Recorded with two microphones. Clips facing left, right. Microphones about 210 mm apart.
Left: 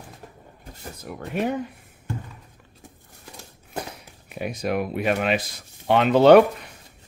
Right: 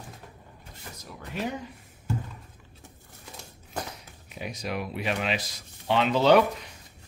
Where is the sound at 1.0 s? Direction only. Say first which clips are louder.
Left 7 dB; 60° left (ahead or behind).